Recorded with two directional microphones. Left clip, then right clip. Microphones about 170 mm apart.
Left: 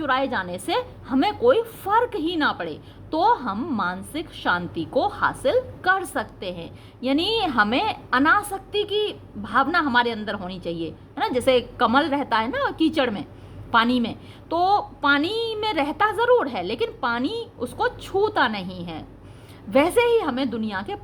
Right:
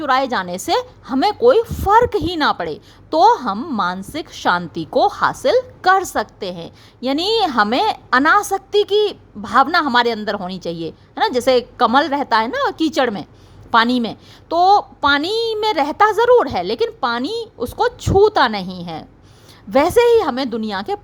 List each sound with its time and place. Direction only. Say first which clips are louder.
0.0 s a woman's voice: right 6 dB; 40° right (ahead or behind)